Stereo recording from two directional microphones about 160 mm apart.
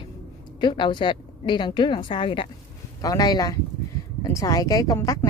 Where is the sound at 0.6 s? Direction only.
30° left (ahead or behind).